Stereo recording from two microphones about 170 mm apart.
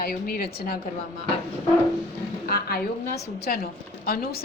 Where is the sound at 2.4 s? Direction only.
65° left (ahead or behind).